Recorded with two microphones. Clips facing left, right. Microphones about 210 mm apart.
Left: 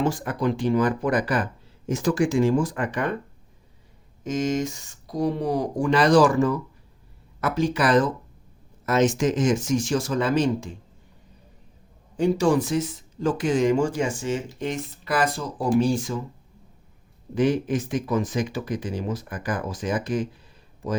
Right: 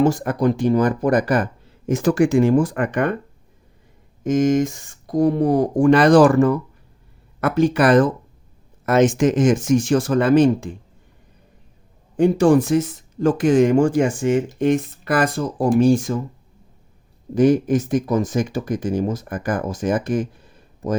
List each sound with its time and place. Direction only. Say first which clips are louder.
0.0 s speech: right 7 dB; 45° right (ahead or behind)
1.9 s speech: right 6 dB; 60° right (ahead or behind)
4.2 s speech: right 8 dB; 50° right (ahead or behind)
12.1 s speech: right 6 dB; 55° right (ahead or behind)
17.3 s speech: right 6 dB; 45° right (ahead or behind)